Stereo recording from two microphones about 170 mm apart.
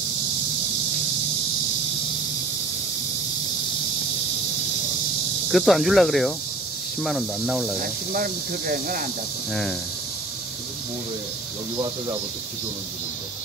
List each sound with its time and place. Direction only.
5.5 s speech: centre (ahead or behind)
7.8 s speech: 60° right (ahead or behind)
9.5 s speech: centre (ahead or behind)
11.7 s speech: 25° right (ahead or behind)